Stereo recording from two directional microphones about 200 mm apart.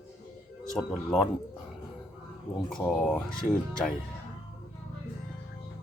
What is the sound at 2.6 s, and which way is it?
Speech, centre (ahead or behind).